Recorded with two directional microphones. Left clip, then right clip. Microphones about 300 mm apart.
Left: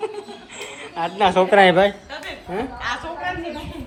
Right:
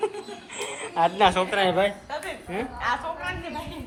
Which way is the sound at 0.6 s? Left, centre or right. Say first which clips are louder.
Right 3 dB; centre.